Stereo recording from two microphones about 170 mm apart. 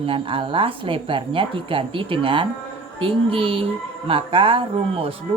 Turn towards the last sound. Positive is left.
turn(degrees=-35)  # may be behind; listen again after turning